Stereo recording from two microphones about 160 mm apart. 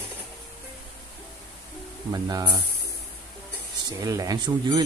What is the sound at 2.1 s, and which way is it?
Speech, 25° right (ahead or behind).